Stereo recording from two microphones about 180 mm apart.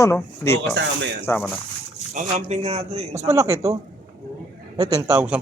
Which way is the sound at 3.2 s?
15° right (ahead or behind).